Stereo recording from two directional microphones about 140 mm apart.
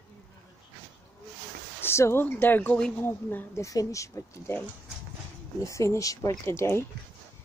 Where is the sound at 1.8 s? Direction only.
20° left (ahead or behind).